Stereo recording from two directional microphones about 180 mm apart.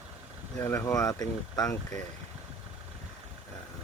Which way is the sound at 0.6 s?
15° left (ahead or behind).